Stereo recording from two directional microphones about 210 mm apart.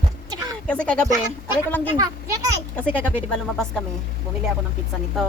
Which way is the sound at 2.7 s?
5° left (ahead or behind).